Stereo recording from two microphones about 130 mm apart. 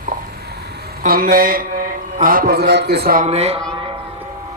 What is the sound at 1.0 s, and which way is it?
Speech, 90° right.